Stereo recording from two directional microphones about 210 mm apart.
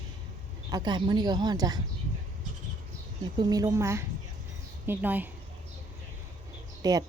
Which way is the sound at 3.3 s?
15° right (ahead or behind).